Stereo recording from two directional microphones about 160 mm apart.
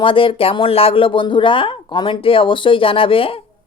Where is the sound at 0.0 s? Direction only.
35° left (ahead or behind).